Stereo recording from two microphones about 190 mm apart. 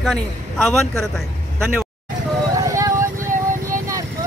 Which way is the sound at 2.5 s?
20° right (ahead or behind).